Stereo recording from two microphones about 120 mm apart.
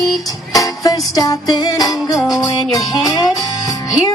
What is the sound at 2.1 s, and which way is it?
Music, centre (ahead or behind).